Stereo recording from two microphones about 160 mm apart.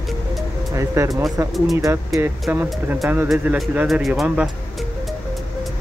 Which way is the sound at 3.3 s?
5° right (ahead or behind).